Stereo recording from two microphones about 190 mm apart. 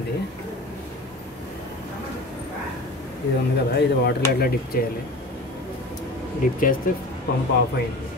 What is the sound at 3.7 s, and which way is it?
Speech, 60° left (ahead or behind).